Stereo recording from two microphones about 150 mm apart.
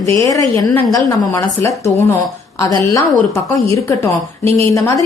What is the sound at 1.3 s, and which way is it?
A woman's voice, 15° left (ahead or behind).